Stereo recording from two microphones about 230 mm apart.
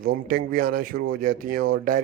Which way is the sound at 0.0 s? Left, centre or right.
Right.